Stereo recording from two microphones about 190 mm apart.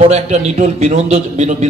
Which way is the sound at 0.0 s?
35° right (ahead or behind).